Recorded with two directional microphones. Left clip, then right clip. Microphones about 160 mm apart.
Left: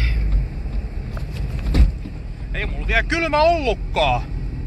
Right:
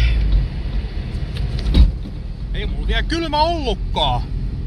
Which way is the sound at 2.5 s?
15° right (ahead or behind).